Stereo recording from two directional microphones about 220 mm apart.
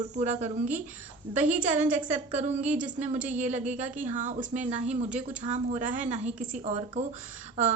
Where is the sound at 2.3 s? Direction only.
30° right (ahead or behind).